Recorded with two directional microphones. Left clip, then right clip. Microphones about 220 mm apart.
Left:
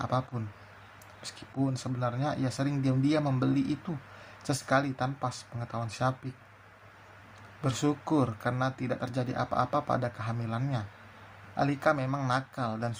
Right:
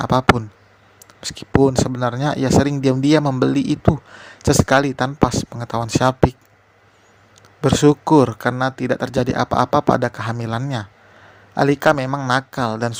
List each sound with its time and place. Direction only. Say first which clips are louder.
0.0 s speech: right 17 dB; 40° right (ahead or behind)
7.6 s speech: right 16 dB; 35° right (ahead or behind)